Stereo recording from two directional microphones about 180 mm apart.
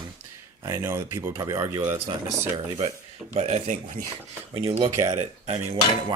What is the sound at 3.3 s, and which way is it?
Speech, 40° right (ahead or behind).